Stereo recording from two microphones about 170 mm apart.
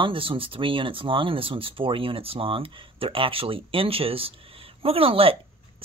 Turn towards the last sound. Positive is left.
turn(degrees=-35)  # may be behind; listen again after turning